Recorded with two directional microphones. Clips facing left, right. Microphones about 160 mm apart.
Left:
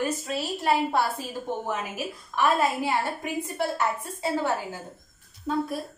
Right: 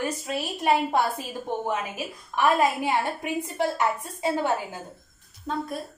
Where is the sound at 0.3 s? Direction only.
15° right (ahead or behind).